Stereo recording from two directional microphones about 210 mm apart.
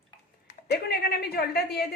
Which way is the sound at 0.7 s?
50° left (ahead or behind).